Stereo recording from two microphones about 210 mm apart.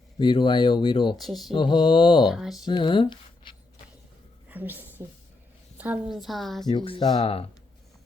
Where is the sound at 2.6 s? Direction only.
20° left (ahead or behind).